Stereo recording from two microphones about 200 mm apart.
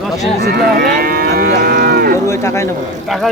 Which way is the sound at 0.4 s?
50° right (ahead or behind).